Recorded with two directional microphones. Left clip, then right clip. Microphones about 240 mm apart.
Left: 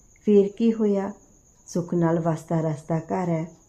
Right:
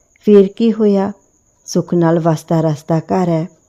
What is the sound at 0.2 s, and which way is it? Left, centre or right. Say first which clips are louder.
Speech: right 10 dB; right.